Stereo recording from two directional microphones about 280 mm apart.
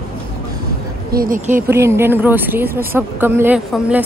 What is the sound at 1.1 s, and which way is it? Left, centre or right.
Speech, right.